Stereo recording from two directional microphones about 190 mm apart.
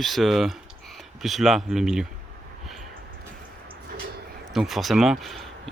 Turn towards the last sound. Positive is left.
turn(degrees=0)  # may be behind; listen again after turning